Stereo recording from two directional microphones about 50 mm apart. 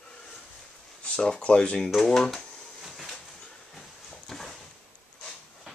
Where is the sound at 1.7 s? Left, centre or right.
Centre.